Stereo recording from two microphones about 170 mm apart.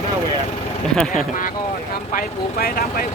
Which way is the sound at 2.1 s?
60° left (ahead or behind).